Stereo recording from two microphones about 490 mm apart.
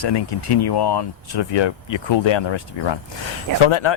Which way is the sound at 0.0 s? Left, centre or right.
Left.